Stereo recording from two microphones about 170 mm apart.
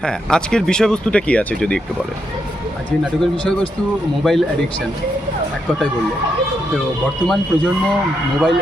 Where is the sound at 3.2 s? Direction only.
5° left (ahead or behind).